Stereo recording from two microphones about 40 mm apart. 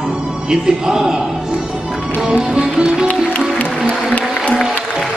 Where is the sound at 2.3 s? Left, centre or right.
Centre.